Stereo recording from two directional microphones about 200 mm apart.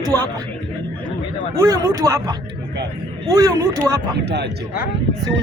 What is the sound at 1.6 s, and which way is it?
Speech, 15° right (ahead or behind).